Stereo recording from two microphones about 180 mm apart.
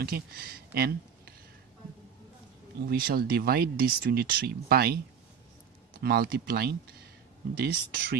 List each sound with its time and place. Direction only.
0.0 s speech: 55° right (ahead or behind)
2.9 s speech: 55° right (ahead or behind)
5.9 s speech: 60° right (ahead or behind)